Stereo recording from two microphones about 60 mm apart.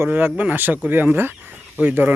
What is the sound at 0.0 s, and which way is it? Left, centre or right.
Speech, right.